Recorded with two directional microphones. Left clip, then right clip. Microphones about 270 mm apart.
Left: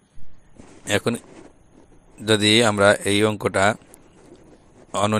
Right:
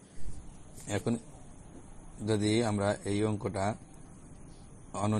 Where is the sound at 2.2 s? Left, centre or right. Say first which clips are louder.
Left 13 dB; left.